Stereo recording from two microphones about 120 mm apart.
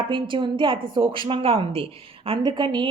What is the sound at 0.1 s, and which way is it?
A woman's voice, 45° right (ahead or behind).